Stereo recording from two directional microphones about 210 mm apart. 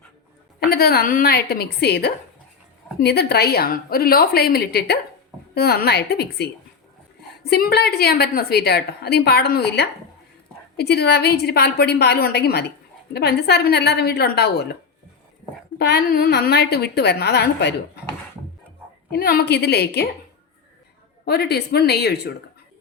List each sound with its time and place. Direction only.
0.6 s a woman's voice: 45° left (ahead or behind)
15.8 s a woman's voice: 50° left (ahead or behind)
19.1 s a woman's voice: 50° left (ahead or behind)
21.2 s a woman's voice: 50° left (ahead or behind)